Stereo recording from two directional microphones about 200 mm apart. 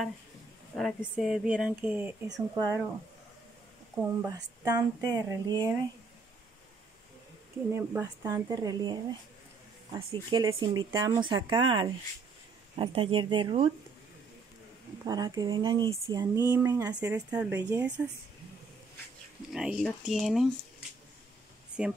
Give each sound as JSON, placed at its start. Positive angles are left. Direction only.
{"t": 0.7, "sound": "speech", "side_deg": 0}
{"t": 4.0, "sound": "speech", "side_deg": -15}
{"t": 7.7, "sound": "speech", "side_deg": -10}
{"t": 15.0, "sound": "speech", "side_deg": -20}
{"t": 19.5, "sound": "speech", "side_deg": -5}
{"t": 21.8, "sound": "speech", "side_deg": -5}